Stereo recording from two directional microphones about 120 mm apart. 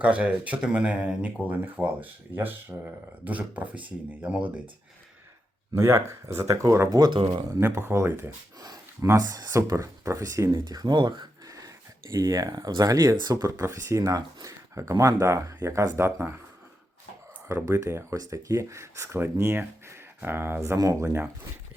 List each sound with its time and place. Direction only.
0.0 s speech: 10° right (ahead or behind)
5.7 s speech: 25° right (ahead or behind)
7.2 s speech: 45° right (ahead or behind)
7.6 s speech: 20° right (ahead or behind)
17.5 s speech: 25° right (ahead or behind)